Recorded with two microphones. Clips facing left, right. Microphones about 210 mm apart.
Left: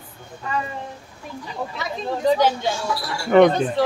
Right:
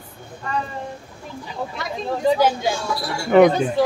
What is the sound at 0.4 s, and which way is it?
Speech, centre (ahead or behind).